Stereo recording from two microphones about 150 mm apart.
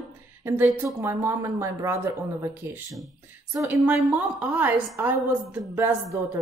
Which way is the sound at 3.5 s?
15° right (ahead or behind).